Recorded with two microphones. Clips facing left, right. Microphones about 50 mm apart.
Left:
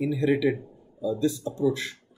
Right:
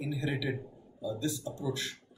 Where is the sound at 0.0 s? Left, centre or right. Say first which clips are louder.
Left 11 dB; left.